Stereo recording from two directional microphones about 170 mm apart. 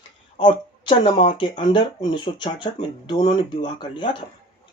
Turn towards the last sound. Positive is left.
turn(degrees=30)  # may be behind; listen again after turning